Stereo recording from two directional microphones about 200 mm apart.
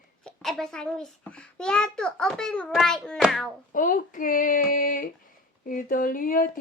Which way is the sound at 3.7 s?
45° left (ahead or behind).